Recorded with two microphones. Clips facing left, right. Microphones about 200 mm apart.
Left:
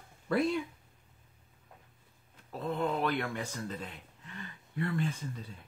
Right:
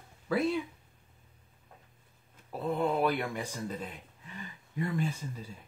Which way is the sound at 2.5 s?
10° right (ahead or behind).